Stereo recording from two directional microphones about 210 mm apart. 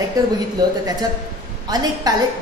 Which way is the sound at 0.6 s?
20° right (ahead or behind).